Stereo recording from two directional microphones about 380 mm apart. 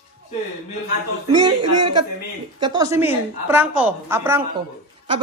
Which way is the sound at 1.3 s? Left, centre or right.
Centre.